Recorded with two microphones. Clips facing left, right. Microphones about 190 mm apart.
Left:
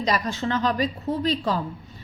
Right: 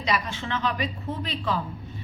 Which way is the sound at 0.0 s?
40° left (ahead or behind).